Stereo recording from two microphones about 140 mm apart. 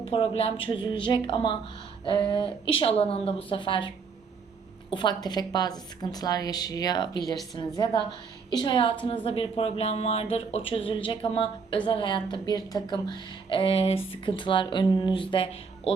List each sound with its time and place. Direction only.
0.0 s a woman's voice: 40° left (ahead or behind)